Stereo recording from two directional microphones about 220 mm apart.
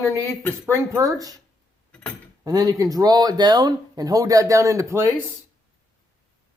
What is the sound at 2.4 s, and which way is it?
Speech, 15° right (ahead or behind).